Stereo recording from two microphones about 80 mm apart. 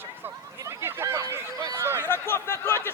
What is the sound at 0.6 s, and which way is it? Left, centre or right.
Speech, right.